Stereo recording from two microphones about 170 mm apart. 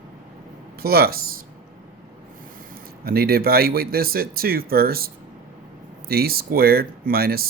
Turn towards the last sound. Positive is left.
turn(degrees=-65)  # may be behind; listen again after turning